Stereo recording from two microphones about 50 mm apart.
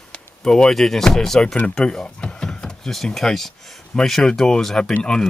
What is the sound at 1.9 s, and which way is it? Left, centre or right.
Door, centre.